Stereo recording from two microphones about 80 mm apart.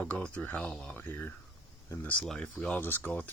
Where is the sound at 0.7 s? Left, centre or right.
Centre.